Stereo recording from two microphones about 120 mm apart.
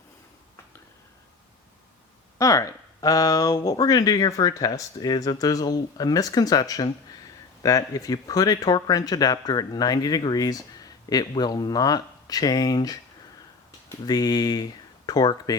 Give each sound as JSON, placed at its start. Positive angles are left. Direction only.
{"t": 2.4, "sound": "speech", "side_deg": 25}
{"t": 14.0, "sound": "speech", "side_deg": 35}